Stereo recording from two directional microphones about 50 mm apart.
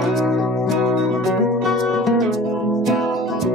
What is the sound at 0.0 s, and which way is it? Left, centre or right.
Music, centre.